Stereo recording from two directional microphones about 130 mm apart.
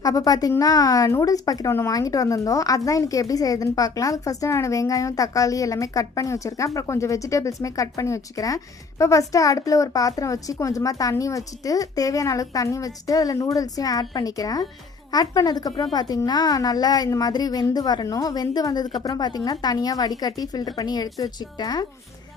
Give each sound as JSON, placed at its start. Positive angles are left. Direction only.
{"t": 0.0, "sound": "a woman's voice", "side_deg": 30}